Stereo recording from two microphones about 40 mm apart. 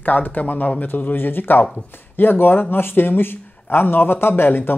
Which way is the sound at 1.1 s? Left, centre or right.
Left.